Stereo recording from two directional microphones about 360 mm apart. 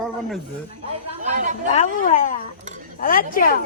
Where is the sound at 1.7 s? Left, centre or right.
Left.